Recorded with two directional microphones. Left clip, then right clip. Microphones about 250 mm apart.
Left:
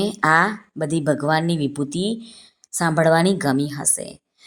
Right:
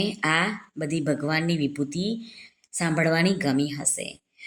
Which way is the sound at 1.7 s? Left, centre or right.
Centre.